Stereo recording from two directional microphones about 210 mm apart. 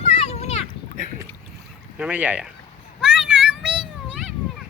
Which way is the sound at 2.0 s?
5° right (ahead or behind).